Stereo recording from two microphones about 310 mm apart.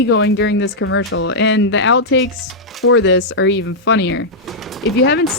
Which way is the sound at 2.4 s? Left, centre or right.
Centre.